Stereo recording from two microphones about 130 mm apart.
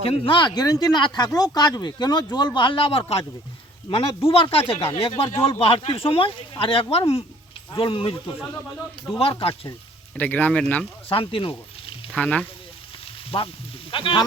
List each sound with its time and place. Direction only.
0.0 s speech: 45° left (ahead or behind)
10.2 s speech: 15° left (ahead or behind)
11.1 s speech: 45° left (ahead or behind)
12.1 s speech: 10° left (ahead or behind)
13.3 s speech: 40° left (ahead or behind)